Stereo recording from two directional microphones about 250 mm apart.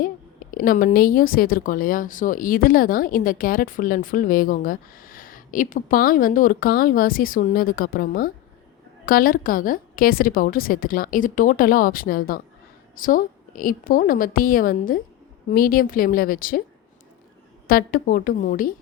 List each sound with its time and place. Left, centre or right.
0.5 s speech: left
17.7 s speech: left